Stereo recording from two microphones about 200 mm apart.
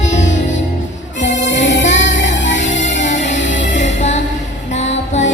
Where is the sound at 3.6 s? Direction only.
35° left (ahead or behind).